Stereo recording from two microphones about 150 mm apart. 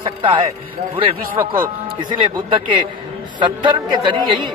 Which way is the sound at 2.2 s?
35° right (ahead or behind).